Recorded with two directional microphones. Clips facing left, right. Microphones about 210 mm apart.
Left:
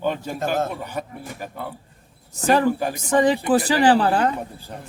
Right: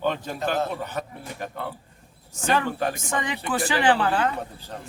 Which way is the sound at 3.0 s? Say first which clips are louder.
Left 11 dB; 35° left (ahead or behind).